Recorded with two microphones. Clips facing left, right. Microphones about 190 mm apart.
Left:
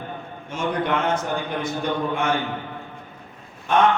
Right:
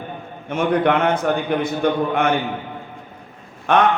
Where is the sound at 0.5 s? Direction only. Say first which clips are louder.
Right 6 dB; 60° right (ahead or behind).